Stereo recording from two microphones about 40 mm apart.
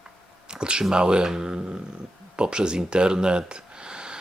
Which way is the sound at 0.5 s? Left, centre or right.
Right.